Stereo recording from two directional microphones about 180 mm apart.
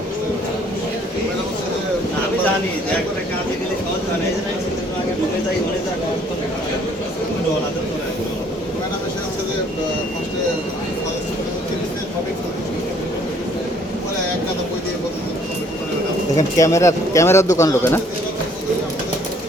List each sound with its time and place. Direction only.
16.6 s speech: 15° left (ahead or behind)